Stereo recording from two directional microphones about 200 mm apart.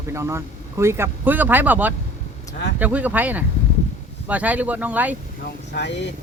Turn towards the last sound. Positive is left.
turn(degrees=60)  # may be behind; listen again after turning